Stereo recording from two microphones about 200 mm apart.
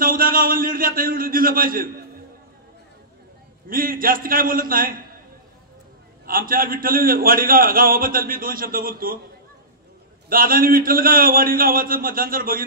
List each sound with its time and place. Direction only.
0.0 s a man's voice: 45° right (ahead or behind)
3.6 s a man's voice: 45° right (ahead or behind)
6.2 s a man's voice: 45° right (ahead or behind)
10.3 s a man's voice: 45° right (ahead or behind)